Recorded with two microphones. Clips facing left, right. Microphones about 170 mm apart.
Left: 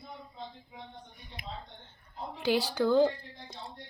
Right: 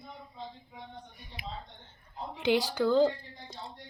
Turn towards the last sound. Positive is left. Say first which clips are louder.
# even
turn(degrees=15)  # may be behind; listen again after turning